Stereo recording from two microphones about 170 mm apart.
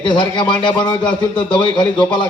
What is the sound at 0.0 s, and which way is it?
A man's voice, 25° left (ahead or behind).